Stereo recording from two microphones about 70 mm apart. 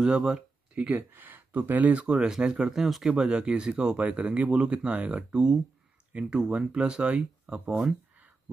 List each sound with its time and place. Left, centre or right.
0.0 s speech: centre
1.1 s speech: right